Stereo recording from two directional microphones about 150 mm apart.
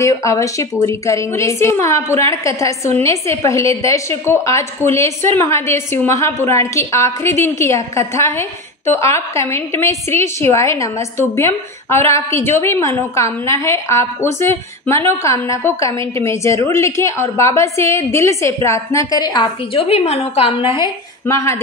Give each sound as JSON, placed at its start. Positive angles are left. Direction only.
{"t": 0.0, "sound": "a woman's voice", "side_deg": 20}
{"t": 21.3, "sound": "a woman's voice", "side_deg": 20}